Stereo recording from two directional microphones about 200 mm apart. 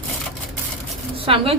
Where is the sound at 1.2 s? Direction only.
25° right (ahead or behind).